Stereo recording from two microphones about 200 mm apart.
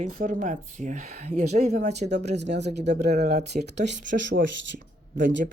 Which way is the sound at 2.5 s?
55° right (ahead or behind).